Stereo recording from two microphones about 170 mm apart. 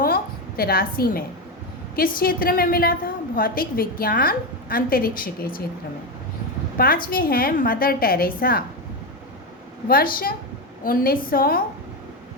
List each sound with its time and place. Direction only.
0.0 s a sound: 60° left (ahead or behind)
2.0 s a woman's voice: 60° left (ahead or behind)
6.7 s a woman's voice: 60° left (ahead or behind)
9.9 s a woman's voice: 60° left (ahead or behind)